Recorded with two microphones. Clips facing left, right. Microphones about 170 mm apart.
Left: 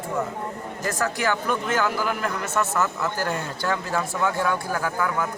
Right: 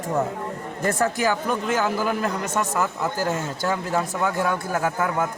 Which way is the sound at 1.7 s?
20° right (ahead or behind).